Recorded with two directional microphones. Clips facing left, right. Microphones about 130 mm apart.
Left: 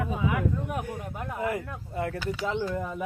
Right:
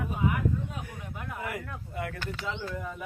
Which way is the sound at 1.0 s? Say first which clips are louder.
Left 6 dB; 35° left (ahead or behind).